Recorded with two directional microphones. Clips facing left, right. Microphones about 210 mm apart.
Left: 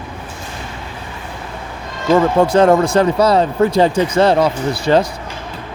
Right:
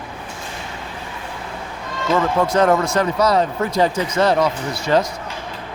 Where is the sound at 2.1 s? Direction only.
30° left (ahead or behind).